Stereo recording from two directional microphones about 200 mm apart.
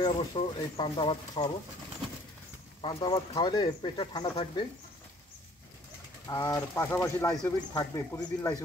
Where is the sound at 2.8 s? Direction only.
20° left (ahead or behind).